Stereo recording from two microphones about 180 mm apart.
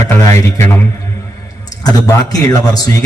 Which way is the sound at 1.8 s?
20° left (ahead or behind).